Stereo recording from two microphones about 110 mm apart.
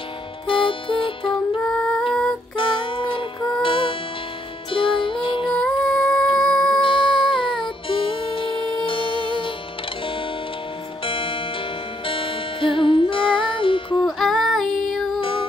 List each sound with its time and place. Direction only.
0.5 s music: 50° left (ahead or behind)
1.6 s music: 5° left (ahead or behind)
2.5 s music: 50° left (ahead or behind)
5.5 s music: 5° left (ahead or behind)
6.8 s music: 50° left (ahead or behind)
11.1 s music: 55° left (ahead or behind)
14.0 s female singing: centre (ahead or behind)